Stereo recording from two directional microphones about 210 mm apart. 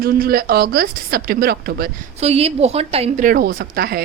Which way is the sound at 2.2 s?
30° right (ahead or behind).